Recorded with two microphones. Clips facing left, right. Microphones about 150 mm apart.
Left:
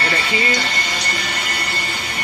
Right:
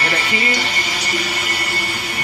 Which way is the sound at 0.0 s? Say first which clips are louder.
Even; 10° right (ahead or behind).